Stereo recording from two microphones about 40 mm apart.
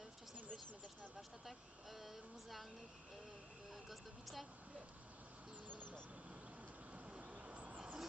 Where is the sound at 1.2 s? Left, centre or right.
Centre.